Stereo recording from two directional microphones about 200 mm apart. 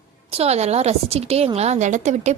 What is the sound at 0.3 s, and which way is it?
A woman's voice, 30° right (ahead or behind).